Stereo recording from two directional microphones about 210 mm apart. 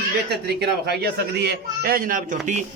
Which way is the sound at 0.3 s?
50° right (ahead or behind).